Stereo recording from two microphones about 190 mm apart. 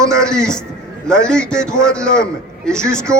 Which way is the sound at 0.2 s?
5° left (ahead or behind).